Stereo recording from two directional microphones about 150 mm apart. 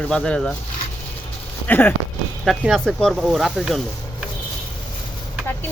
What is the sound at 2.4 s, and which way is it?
Speech, centre (ahead or behind).